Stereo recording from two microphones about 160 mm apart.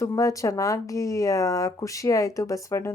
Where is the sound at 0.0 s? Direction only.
20° left (ahead or behind).